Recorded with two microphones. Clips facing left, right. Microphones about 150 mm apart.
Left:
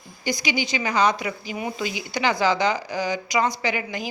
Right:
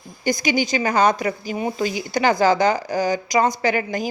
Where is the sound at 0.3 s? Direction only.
45° right (ahead or behind).